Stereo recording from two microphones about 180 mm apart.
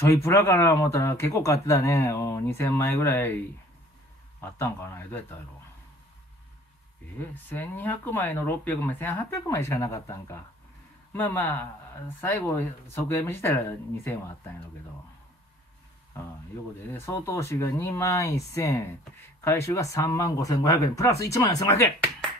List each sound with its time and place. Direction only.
0.0 s speech: 15° left (ahead or behind)
4.4 s speech: 10° left (ahead or behind)
7.2 s speech: 10° left (ahead or behind)
16.9 s speech: 15° left (ahead or behind)